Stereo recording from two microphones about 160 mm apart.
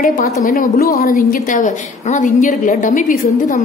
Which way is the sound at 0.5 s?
60° left (ahead or behind).